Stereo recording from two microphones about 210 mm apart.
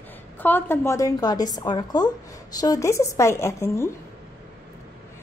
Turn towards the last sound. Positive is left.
turn(degrees=15)  # may be behind; listen again after turning